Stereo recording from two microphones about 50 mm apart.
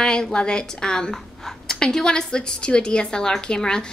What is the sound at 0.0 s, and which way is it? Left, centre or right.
A woman's voice, centre.